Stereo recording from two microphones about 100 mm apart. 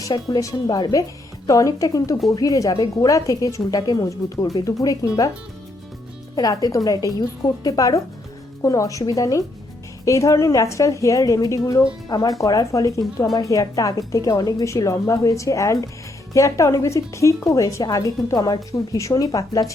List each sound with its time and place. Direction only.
0.3 s a woman's voice: 35° left (ahead or behind)
6.3 s a woman's voice: 40° left (ahead or behind)